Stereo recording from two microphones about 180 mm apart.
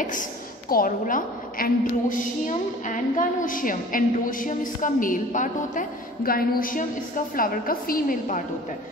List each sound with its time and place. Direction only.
0.0 s a woman's voice: 45° left (ahead or behind)